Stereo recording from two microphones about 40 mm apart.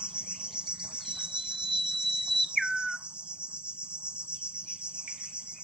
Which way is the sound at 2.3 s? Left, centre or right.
Centre.